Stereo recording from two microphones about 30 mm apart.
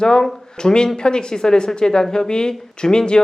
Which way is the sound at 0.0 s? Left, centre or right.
Left.